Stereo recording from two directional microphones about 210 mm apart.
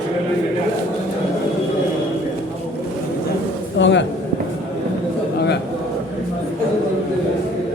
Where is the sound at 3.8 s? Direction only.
60° left (ahead or behind).